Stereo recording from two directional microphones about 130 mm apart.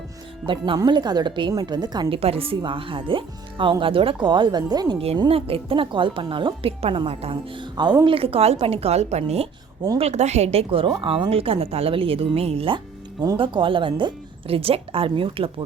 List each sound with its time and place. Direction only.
0.4 s a woman's voice: 40° right (ahead or behind)
4.9 s a woman's voice: 45° right (ahead or behind)